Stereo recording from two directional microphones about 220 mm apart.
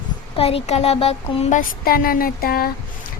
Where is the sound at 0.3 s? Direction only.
25° left (ahead or behind).